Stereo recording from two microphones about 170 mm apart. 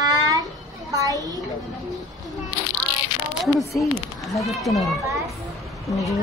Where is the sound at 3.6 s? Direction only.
20° left (ahead or behind).